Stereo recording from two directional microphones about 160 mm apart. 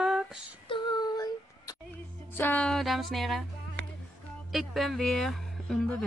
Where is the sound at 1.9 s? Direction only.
10° left (ahead or behind).